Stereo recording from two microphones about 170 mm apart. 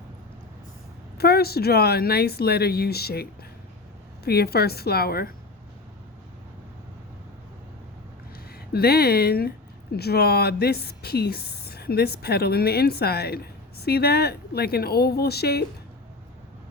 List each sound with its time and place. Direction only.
1.2 s a woman's voice: 65° left (ahead or behind)
8.5 s a woman's voice: 65° left (ahead or behind)